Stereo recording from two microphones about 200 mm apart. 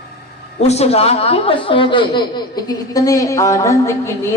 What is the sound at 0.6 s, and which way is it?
A woman's voice, 30° left (ahead or behind).